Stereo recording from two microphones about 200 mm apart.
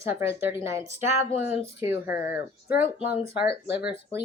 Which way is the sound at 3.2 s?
30° left (ahead or behind).